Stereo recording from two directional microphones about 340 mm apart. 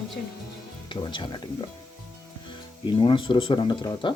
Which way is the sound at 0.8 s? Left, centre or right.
Centre.